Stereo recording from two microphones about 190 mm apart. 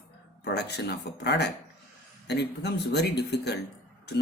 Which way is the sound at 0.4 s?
60° left (ahead or behind).